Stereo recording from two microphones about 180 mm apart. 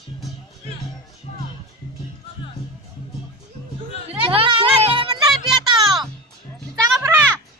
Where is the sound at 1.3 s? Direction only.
40° left (ahead or behind).